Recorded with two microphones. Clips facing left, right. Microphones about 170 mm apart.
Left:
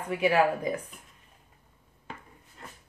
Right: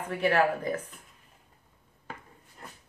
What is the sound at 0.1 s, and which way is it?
Speech, 10° left (ahead or behind).